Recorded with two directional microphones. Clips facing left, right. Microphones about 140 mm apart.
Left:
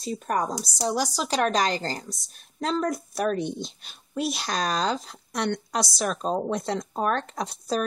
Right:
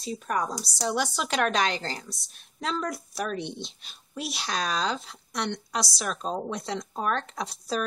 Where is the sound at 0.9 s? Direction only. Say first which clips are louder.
Left 1 dB; 40° left (ahead or behind).